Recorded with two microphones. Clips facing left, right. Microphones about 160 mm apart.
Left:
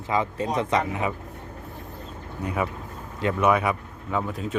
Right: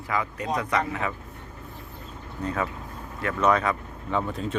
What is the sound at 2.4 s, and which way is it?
Speech, 15° left (ahead or behind).